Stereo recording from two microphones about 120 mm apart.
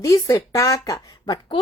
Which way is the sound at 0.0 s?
30° left (ahead or behind).